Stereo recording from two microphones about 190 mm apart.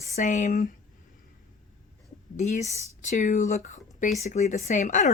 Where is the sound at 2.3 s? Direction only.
35° left (ahead or behind).